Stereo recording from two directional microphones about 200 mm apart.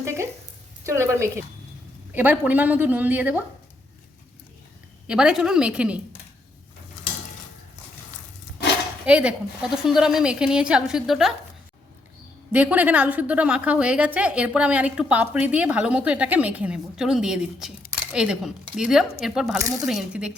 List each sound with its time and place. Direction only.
0.0 s a sound: 15° right (ahead or behind)
0.9 s a woman's voice: 15° right (ahead or behind)
5.0 s a woman's voice: 5° right (ahead or behind)
9.0 s a woman's voice: 5° right (ahead or behind)
12.5 s a woman's voice: 10° right (ahead or behind)
19.5 s a woman's voice: 15° right (ahead or behind)
19.8 s a woman's voice: centre (ahead or behind)